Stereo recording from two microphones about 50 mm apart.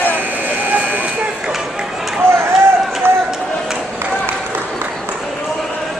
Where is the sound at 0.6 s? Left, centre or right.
Right.